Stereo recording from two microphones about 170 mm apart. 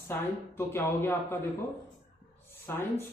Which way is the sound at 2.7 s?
15° left (ahead or behind).